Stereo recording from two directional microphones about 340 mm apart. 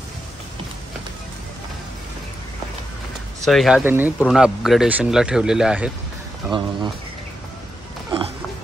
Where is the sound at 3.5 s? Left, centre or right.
Centre.